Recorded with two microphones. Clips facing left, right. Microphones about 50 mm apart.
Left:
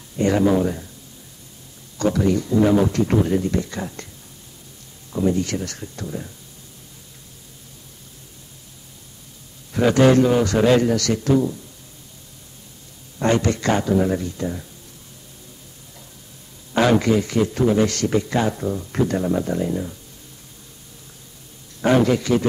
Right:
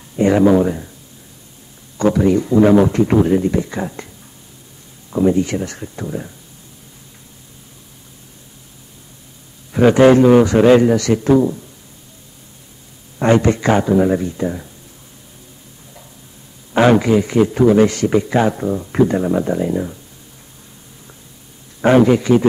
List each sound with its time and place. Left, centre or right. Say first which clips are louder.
0.1 s speech: right 6 dB; right
2.0 s speech: right 5 dB; right
5.1 s speech: right 6 dB; right
9.7 s speech: right 6 dB; right
13.2 s speech: right 6 dB; right
16.7 s speech: right 5 dB; right
21.8 s speech: right 6 dB; right